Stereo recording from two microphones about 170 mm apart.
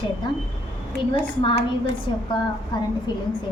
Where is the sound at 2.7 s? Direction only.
25° left (ahead or behind).